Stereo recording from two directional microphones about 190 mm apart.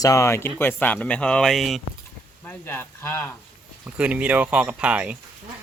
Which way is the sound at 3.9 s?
5° right (ahead or behind).